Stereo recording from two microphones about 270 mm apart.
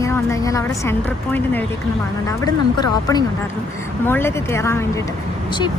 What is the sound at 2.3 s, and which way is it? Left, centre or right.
A woman's voice, centre.